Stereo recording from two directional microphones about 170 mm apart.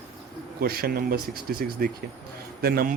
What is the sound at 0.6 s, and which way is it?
Speech, 65° right (ahead or behind).